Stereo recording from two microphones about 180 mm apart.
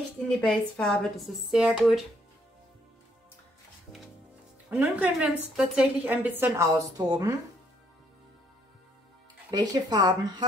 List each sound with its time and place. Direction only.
0.4 s speech: 5° left (ahead or behind)
4.6 s a woman's voice: 10° right (ahead or behind)
9.5 s speech: 25° right (ahead or behind)